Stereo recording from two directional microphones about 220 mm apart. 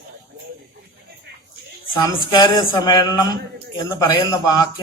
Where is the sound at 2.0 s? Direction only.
15° left (ahead or behind).